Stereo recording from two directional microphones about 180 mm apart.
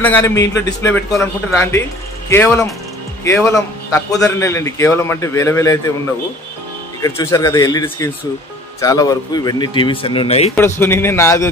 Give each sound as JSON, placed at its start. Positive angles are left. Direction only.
{"t": 0.0, "sound": "a man's voice", "side_deg": 10}
{"t": 7.0, "sound": "a man's voice", "side_deg": 15}
{"t": 10.5, "sound": "a man's voice", "side_deg": 10}